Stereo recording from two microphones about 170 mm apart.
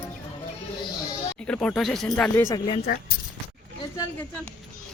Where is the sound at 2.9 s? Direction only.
60° left (ahead or behind).